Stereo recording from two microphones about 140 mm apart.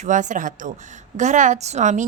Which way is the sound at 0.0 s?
60° right (ahead or behind).